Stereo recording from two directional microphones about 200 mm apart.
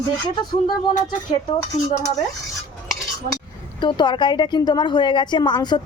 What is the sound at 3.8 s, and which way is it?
A woman's voice, 20° left (ahead or behind).